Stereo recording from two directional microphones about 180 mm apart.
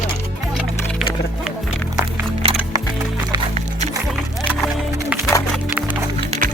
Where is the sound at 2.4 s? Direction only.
30° right (ahead or behind).